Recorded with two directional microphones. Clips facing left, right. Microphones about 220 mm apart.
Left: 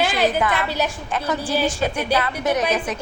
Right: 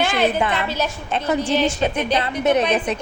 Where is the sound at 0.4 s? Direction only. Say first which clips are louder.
Even; 25° right (ahead or behind).